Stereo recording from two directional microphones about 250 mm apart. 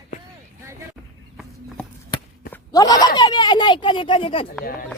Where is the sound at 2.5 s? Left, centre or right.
Centre.